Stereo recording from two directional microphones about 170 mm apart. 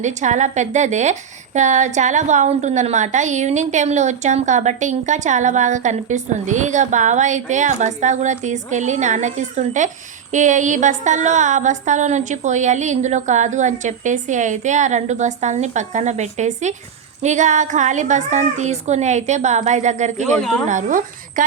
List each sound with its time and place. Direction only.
0.0 s a woman's voice: 45° right (ahead or behind)